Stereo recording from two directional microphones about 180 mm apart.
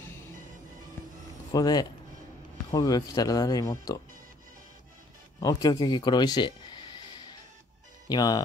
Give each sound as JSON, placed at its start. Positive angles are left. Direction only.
{"t": 1.5, "sound": "speech", "side_deg": 20}
{"t": 5.4, "sound": "speech", "side_deg": 20}
{"t": 8.1, "sound": "speech", "side_deg": 20}